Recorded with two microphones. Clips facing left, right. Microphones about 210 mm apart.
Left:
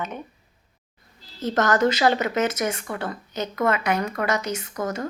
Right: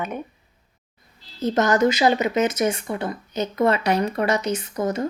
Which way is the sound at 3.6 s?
30° right (ahead or behind).